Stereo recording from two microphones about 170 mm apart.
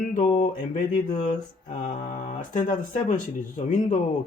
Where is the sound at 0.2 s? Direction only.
45° left (ahead or behind).